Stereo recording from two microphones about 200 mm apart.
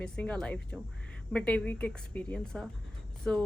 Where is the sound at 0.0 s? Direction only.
5° left (ahead or behind).